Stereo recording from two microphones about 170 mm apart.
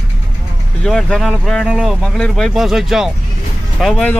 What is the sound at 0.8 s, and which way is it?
Speech, 5° left (ahead or behind).